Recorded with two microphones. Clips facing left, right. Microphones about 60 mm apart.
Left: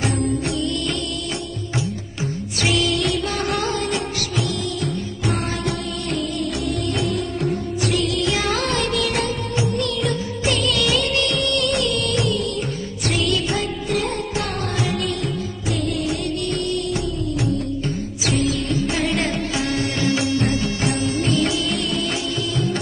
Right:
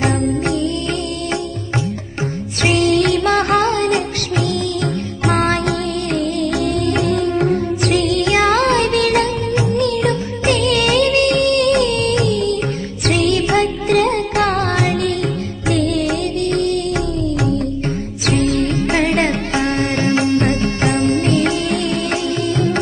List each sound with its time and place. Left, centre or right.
2.6 s music: right
5.2 s music: right
18.2 s music: right